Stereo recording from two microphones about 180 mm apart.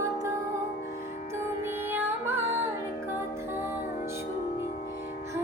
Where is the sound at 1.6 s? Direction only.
10° right (ahead or behind).